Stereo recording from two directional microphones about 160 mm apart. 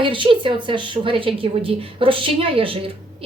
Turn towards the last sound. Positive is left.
turn(degrees=-35)  # may be behind; listen again after turning